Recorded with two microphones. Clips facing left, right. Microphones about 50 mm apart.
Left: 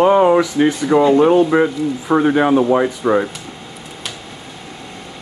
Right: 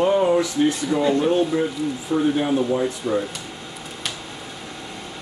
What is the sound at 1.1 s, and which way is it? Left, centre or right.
Speech, left.